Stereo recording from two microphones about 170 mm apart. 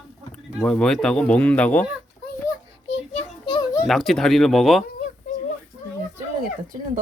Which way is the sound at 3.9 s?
Centre (ahead or behind).